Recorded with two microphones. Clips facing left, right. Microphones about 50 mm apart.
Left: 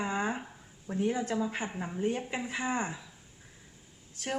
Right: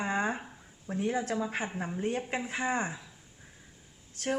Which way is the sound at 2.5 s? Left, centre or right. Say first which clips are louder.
Right 1 dB; right.